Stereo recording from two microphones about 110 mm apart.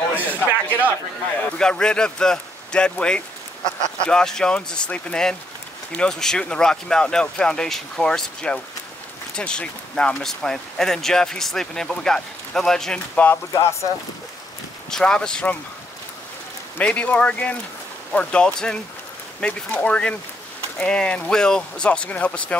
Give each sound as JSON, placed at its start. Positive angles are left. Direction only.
{"t": 0.1, "sound": "a sound", "side_deg": -15}
{"t": 1.4, "sound": "speech", "side_deg": 10}
{"t": 13.5, "sound": "speech", "side_deg": 25}
{"t": 14.9, "sound": "speech", "side_deg": 5}
{"t": 16.7, "sound": "speech", "side_deg": 10}